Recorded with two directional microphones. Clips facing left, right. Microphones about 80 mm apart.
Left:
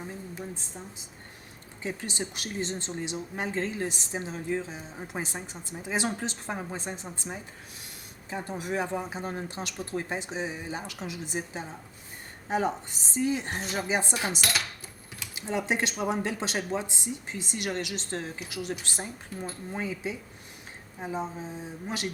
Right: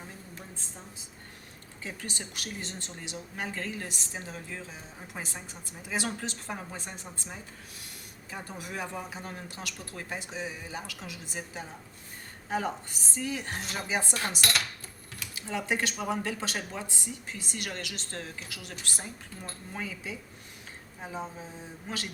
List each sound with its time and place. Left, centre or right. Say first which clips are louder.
1.8 s speech: left 6 dB; left